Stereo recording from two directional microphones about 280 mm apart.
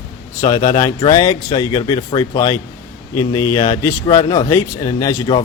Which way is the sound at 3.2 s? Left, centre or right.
Left.